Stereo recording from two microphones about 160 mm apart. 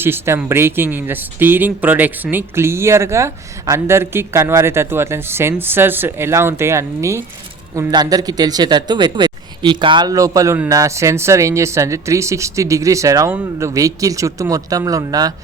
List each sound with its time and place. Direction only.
0.0 s speech: 15° right (ahead or behind)